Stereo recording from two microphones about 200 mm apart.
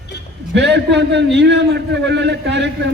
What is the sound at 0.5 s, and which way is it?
A man's voice, 60° right (ahead or behind).